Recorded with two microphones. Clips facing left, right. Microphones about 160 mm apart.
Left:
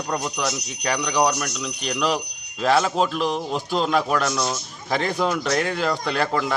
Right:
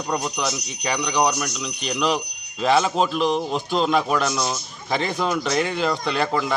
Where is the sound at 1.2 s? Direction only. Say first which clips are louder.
Even; 10° right (ahead or behind).